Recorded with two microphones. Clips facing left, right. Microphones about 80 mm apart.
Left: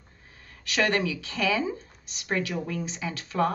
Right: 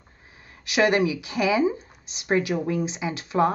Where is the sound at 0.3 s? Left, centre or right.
Centre.